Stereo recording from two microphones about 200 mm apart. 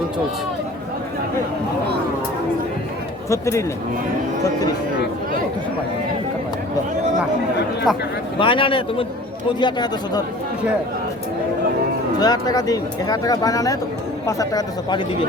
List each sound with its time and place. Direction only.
3.2 s speech: 15° left (ahead or behind)
7.9 s speech: centre (ahead or behind)
8.4 s speech: 25° left (ahead or behind)
12.2 s speech: 20° left (ahead or behind)